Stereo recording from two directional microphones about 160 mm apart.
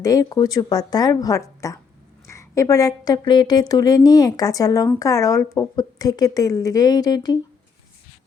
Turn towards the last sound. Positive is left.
turn(degrees=25)  # may be behind; listen again after turning